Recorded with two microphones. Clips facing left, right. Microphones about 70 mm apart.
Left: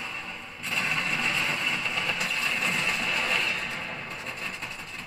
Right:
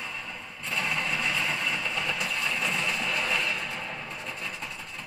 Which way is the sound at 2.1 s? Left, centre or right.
Centre.